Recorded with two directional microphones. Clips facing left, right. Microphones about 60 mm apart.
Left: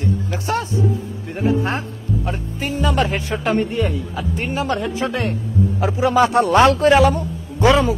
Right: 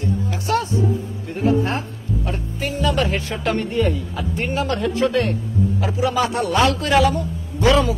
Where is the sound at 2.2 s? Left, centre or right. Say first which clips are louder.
Left 1 dB; centre.